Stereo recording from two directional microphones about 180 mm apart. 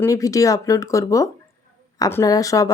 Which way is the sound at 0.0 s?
20° left (ahead or behind).